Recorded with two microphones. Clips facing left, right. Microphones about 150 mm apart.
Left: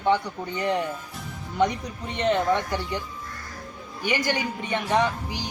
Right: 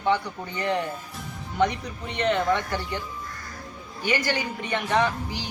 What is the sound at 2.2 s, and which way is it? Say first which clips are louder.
Speech: left 1 dB; 15° left (ahead or behind).